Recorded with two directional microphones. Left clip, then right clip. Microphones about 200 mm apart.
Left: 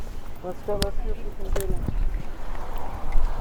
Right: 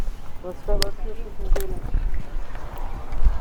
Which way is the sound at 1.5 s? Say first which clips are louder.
Even; 30° right (ahead or behind).